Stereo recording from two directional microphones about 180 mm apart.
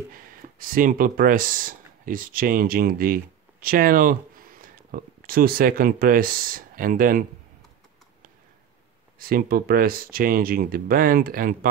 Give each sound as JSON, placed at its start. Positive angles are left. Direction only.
{"t": 0.1, "sound": "speech", "side_deg": -50}
{"t": 9.2, "sound": "speech", "side_deg": -55}